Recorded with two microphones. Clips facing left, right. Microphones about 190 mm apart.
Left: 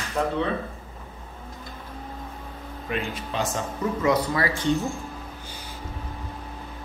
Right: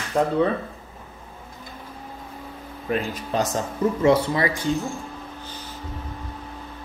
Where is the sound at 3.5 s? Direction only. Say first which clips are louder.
Right 4 dB; 30° right (ahead or behind).